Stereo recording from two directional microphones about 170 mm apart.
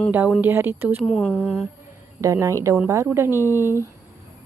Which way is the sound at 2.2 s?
15° right (ahead or behind).